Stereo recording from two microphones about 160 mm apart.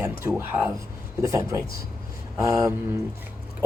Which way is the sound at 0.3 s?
15° right (ahead or behind).